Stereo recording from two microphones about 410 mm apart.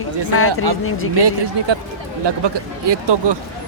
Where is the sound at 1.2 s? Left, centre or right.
Right.